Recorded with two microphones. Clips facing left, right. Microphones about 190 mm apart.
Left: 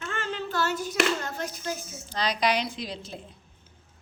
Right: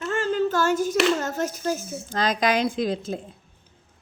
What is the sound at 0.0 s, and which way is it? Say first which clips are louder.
Speech: right 10 dB; 40° right (ahead or behind).